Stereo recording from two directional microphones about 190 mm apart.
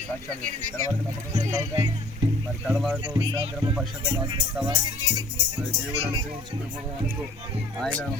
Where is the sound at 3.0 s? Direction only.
25° right (ahead or behind).